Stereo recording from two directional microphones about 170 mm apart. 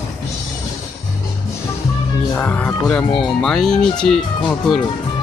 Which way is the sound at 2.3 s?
10° left (ahead or behind).